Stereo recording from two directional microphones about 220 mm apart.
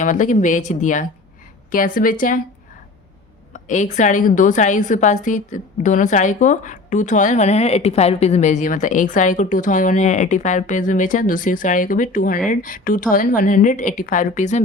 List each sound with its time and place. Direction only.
0.0 s a woman's voice: 35° left (ahead or behind)
3.5 s a woman's voice: 35° left (ahead or behind)